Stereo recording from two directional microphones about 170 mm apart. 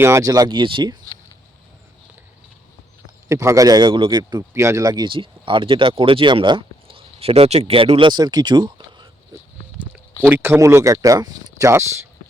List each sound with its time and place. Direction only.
0.0 s a man's voice: 15° right (ahead or behind)
3.2 s a man's voice: 20° right (ahead or behind)
10.2 s speech: 10° right (ahead or behind)